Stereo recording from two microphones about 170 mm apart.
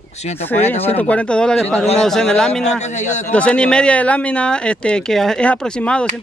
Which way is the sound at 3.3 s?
5° left (ahead or behind).